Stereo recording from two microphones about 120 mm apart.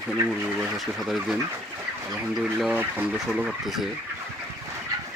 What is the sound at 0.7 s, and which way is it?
Speech, centre (ahead or behind).